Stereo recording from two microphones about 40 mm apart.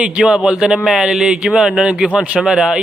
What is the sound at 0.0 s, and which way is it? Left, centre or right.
Speech, right.